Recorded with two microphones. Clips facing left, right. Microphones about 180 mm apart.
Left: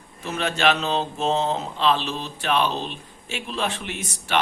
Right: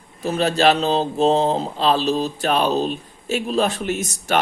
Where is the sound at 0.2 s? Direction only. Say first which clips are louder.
Right 6 dB; 35° right (ahead or behind).